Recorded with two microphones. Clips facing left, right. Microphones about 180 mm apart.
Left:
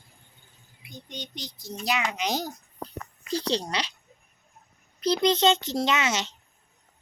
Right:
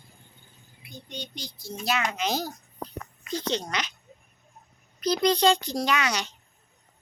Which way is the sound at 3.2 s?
35° left (ahead or behind).